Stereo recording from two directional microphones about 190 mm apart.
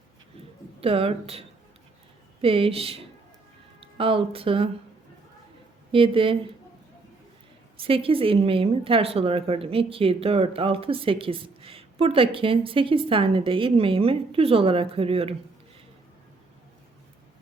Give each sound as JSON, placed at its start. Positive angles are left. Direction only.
{"t": 0.8, "sound": "a woman's voice", "side_deg": -30}
{"t": 5.9, "sound": "a woman's voice", "side_deg": -25}
{"t": 7.8, "sound": "a woman's voice", "side_deg": -30}